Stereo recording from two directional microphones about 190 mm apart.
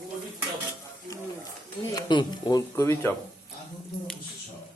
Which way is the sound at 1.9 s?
25° left (ahead or behind).